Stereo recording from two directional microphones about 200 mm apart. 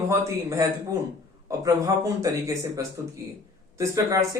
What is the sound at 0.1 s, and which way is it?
Speech, 15° right (ahead or behind).